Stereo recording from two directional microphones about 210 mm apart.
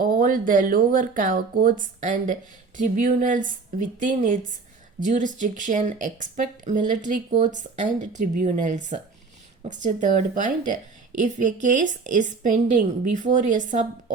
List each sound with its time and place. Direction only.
0.0 s speech: 40° right (ahead or behind)